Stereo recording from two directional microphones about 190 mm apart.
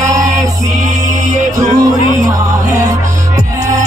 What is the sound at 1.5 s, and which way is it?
Music, 20° right (ahead or behind).